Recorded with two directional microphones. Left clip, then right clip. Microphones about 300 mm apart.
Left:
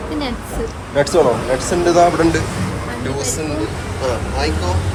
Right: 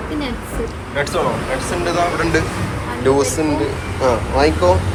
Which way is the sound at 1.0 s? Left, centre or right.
Centre.